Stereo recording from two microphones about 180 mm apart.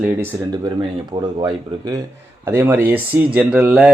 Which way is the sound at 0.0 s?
15° right (ahead or behind).